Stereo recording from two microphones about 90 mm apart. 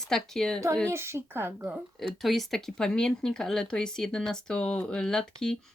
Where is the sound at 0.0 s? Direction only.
5° left (ahead or behind).